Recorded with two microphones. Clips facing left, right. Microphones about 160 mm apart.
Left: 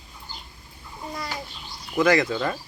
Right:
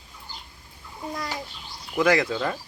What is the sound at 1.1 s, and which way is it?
Babbling, centre (ahead or behind).